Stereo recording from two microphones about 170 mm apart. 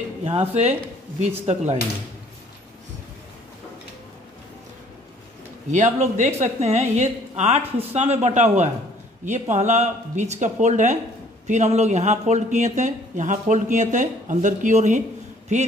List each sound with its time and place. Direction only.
0.2 s speech: 35° right (ahead or behind)
5.7 s speech: 45° right (ahead or behind)